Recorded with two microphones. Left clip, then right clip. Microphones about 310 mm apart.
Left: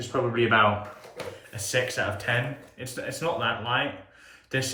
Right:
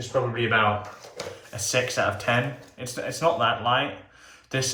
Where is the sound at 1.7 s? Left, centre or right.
Centre.